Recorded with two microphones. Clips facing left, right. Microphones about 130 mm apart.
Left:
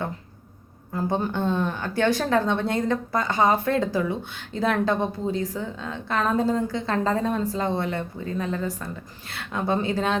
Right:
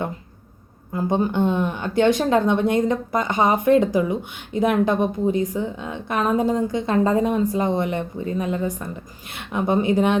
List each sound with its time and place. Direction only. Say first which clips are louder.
1.3 s speech: right 4 dB; 15° right (ahead or behind)